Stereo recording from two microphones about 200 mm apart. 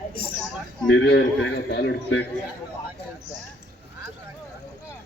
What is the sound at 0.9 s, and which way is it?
A man's voice, 60° left (ahead or behind).